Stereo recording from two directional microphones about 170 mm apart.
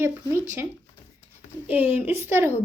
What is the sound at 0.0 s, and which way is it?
Speech, 15° right (ahead or behind).